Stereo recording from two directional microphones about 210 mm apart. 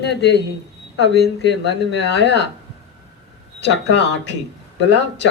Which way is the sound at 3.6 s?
55° left (ahead or behind).